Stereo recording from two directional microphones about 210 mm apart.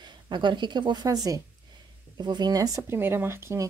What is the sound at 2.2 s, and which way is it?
Speech, 20° right (ahead or behind).